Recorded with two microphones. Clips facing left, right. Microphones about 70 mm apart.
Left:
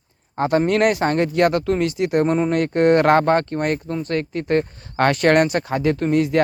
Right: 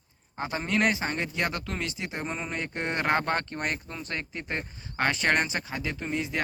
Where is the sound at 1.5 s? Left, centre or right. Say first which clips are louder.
Left 14 dB; left.